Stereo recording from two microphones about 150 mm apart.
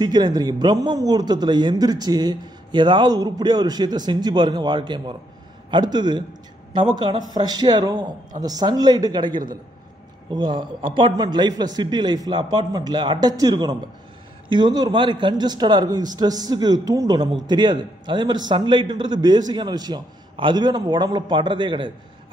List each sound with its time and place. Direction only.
0.0 s speech: 30° right (ahead or behind)